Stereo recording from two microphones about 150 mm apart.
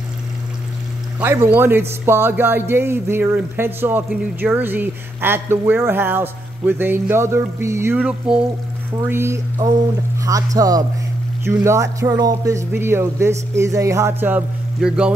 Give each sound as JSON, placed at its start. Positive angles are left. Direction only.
{"t": 1.2, "sound": "speech", "side_deg": -15}
{"t": 9.1, "sound": "speech", "side_deg": -20}